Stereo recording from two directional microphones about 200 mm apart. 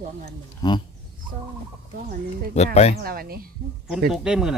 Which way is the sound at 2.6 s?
30° left (ahead or behind).